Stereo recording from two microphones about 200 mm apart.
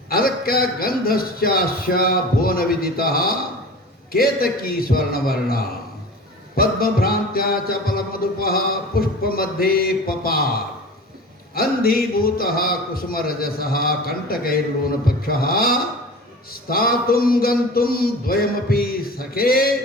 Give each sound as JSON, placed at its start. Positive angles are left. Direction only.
{"t": 0.1, "sound": "a man's voice", "side_deg": 50}
{"t": 11.5, "sound": "a man's voice", "side_deg": 50}